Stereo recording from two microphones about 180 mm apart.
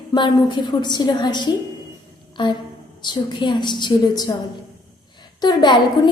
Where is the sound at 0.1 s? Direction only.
25° left (ahead or behind).